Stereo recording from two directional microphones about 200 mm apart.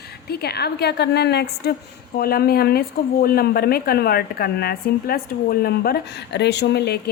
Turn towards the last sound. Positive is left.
turn(degrees=55)  # may be behind; listen again after turning